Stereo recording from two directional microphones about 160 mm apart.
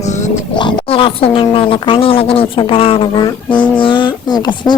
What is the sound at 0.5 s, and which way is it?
Speech, 30° left (ahead or behind).